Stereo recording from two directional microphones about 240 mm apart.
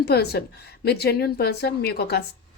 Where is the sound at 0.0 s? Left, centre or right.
Left.